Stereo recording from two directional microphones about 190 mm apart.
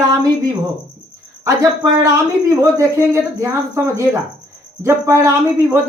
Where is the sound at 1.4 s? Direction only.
15° right (ahead or behind).